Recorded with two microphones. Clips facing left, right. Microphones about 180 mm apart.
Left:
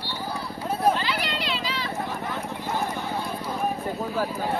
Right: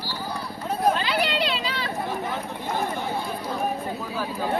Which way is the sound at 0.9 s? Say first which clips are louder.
Right 3 dB; 60° right (ahead or behind).